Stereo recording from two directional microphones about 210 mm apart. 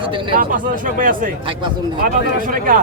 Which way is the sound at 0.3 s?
40° right (ahead or behind).